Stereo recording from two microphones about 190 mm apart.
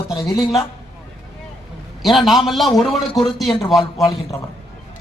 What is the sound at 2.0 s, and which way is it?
A man's voice, centre (ahead or behind).